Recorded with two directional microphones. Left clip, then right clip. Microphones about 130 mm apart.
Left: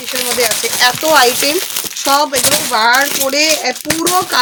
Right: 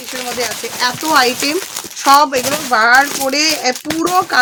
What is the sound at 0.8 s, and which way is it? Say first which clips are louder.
Speech: left 3 dB; 60° right (ahead or behind).